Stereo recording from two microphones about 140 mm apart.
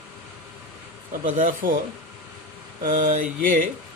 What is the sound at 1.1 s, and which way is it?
Mantra, 70° right (ahead or behind).